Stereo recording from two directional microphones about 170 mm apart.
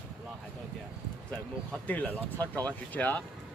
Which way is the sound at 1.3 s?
10° left (ahead or behind).